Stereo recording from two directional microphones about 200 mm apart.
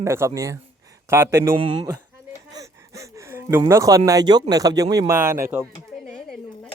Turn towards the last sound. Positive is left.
turn(degrees=-10)  # may be behind; listen again after turning